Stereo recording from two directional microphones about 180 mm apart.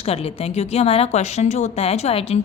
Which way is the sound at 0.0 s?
35° left (ahead or behind).